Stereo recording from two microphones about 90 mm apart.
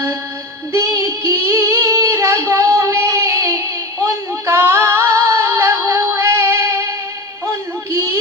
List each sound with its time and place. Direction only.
0.7 s female singing: 35° right (ahead or behind)
4.3 s music: 30° right (ahead or behind)
7.9 s a sound: 35° right (ahead or behind)